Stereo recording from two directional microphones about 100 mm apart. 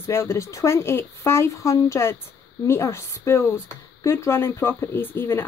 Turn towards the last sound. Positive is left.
turn(degrees=25)  # may be behind; listen again after turning